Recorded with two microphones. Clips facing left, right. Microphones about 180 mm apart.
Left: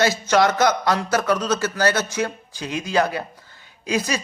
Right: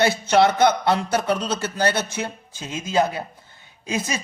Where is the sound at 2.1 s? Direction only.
20° right (ahead or behind).